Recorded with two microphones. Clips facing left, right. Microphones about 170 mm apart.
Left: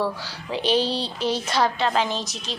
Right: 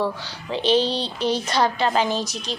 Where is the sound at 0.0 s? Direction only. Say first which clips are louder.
Right 1 dB; 5° left (ahead or behind).